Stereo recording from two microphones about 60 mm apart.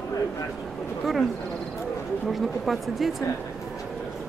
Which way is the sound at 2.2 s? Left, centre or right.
Centre.